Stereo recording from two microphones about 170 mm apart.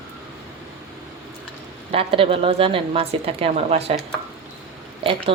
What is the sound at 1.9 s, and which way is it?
Speech, 35° right (ahead or behind).